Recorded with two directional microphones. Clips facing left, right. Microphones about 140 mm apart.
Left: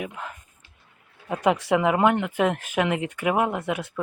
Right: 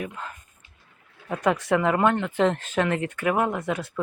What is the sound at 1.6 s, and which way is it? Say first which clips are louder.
Speech: even; 15° left (ahead or behind).